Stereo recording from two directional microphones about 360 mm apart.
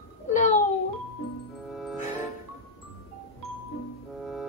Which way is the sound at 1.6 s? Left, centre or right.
Centre.